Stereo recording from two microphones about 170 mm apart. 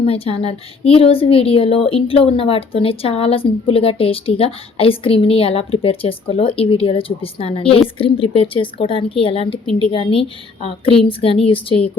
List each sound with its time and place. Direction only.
0.0 s a woman's voice: 35° left (ahead or behind)